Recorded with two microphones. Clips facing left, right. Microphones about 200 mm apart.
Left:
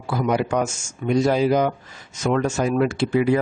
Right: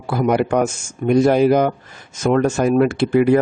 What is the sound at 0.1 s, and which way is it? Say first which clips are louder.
Speech: right 4 dB; 55° right (ahead or behind).